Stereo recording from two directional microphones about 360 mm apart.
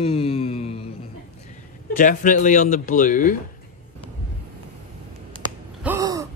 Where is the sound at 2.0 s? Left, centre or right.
Left.